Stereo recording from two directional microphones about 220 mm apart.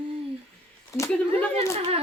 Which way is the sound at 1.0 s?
15° left (ahead or behind).